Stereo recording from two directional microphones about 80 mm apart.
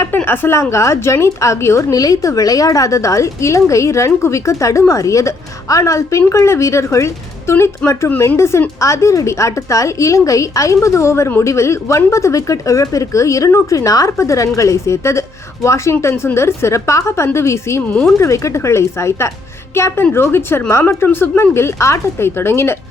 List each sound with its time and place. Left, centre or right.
0.3 s a woman's voice: left